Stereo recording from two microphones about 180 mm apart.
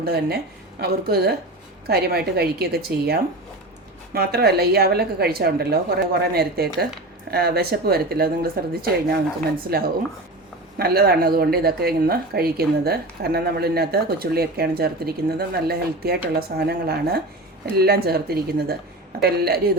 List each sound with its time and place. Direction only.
0.0 s a woman's voice: 60° right (ahead or behind)